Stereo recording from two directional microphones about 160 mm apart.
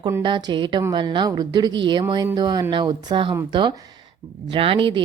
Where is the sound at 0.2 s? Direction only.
30° right (ahead or behind).